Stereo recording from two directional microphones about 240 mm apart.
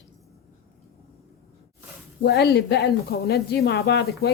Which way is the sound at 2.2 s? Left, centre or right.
Left.